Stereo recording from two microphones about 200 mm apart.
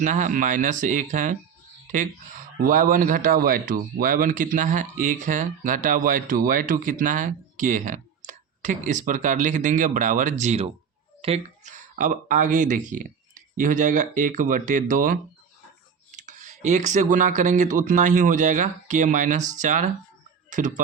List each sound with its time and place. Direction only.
0.0 s speech: 40° right (ahead or behind)